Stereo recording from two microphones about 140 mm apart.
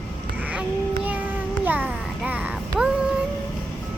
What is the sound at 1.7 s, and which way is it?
Speech, 10° right (ahead or behind).